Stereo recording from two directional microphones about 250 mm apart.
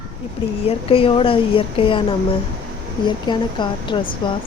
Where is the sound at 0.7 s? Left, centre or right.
Left.